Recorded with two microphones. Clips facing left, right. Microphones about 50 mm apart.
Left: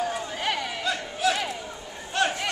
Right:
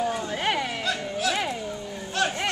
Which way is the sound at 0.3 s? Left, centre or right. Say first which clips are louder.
Right 3 dB; centre.